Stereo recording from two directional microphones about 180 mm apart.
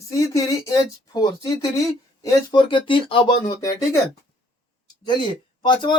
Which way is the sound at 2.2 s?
25° left (ahead or behind).